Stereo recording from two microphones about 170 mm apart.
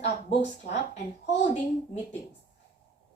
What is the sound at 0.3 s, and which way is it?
Speech, 40° left (ahead or behind).